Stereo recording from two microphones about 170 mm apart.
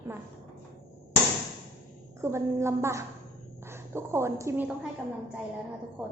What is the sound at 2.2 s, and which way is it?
A woman's voice, 15° right (ahead or behind).